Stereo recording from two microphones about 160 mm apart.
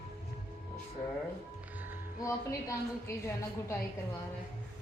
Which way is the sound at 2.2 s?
20° left (ahead or behind).